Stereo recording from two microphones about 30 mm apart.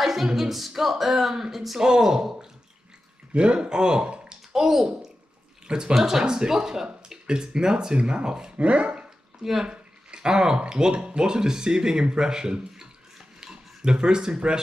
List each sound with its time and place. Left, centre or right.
0.0 s a capella: centre
0.4 s speech: centre
1.8 s speech: centre
3.3 s speech: right
4.1 s a sound: right
4.5 s a child's voice: centre
4.8 s a child's voice: right
5.9 s speech: centre; by 8.5 s right
8.5 s speech: right
9.4 s speech: centre
9.7 s a sound: right
10.7 s speech: right
13.4 s a sound: right